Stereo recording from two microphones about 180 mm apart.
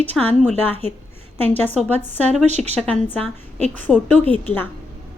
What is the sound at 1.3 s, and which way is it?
Speech, 10° left (ahead or behind).